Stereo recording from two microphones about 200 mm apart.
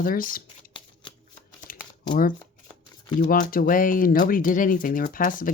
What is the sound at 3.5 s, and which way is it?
Speech, 45° left (ahead or behind).